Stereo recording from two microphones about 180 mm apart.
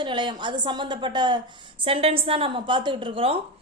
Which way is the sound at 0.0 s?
25° right (ahead or behind).